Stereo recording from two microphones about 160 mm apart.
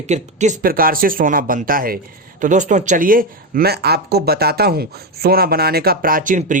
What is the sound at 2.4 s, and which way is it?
Speech, 50° right (ahead or behind).